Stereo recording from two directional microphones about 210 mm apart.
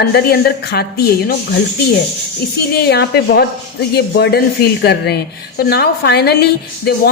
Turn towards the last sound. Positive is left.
turn(degrees=50)  # may be behind; listen again after turning